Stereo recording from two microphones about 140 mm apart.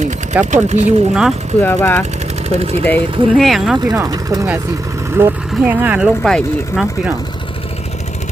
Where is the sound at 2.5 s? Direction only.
45° right (ahead or behind).